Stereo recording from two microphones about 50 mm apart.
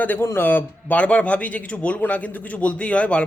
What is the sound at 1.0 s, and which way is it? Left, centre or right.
A man's voice, left.